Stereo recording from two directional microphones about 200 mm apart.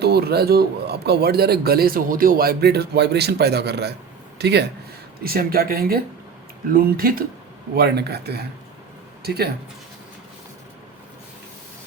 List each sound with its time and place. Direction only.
0.0 s a man's voice: 50° right (ahead or behind)